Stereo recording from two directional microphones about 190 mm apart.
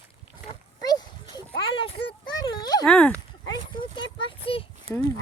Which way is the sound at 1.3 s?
25° left (ahead or behind).